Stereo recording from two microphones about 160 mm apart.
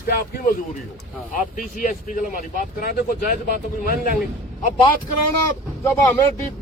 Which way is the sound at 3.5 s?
65° left (ahead or behind).